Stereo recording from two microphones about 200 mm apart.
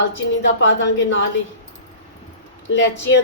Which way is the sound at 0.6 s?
65° left (ahead or behind).